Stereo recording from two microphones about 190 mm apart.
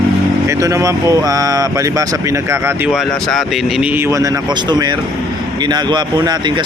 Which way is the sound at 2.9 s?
Centre (ahead or behind).